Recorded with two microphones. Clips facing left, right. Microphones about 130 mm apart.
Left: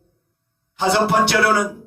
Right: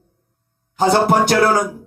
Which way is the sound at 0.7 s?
40° right (ahead or behind).